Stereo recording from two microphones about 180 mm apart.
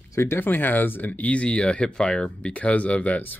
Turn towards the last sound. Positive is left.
turn(degrees=10)  # may be behind; listen again after turning